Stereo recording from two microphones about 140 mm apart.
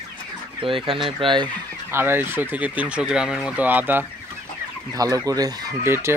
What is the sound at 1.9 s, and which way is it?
Speech, 15° right (ahead or behind).